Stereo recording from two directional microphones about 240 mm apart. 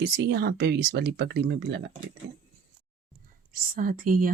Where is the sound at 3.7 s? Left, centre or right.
Right.